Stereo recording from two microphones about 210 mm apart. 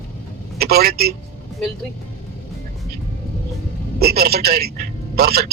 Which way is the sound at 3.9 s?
50° right (ahead or behind).